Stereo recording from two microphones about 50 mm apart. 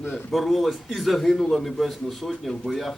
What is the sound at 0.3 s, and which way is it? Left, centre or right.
A man's voice, centre.